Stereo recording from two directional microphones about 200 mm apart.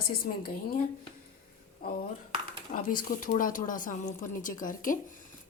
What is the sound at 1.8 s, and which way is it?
Speech, 45° left (ahead or behind).